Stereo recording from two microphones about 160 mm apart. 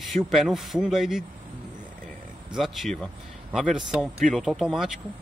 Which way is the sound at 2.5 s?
Centre (ahead or behind).